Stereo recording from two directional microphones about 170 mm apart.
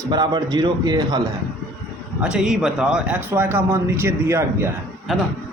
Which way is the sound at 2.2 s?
5° right (ahead or behind).